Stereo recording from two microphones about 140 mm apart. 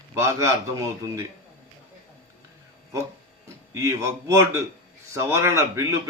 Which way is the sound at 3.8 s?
20° right (ahead or behind).